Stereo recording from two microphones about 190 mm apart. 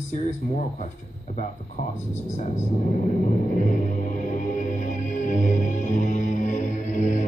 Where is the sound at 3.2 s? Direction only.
40° left (ahead or behind).